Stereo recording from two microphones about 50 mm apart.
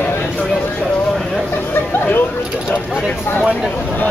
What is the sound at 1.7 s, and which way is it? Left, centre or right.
Chatter, left.